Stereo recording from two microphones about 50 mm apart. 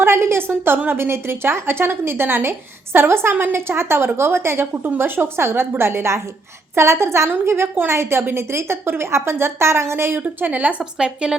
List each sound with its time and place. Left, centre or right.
0.0 s a woman's voice: right
4.6 s a woman's voice: right
10.2 s a woman's voice: right
10.9 s a woman's voice: centre